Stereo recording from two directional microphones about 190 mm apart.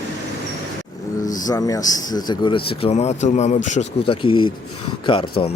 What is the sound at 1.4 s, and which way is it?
Speech, 20° left (ahead or behind).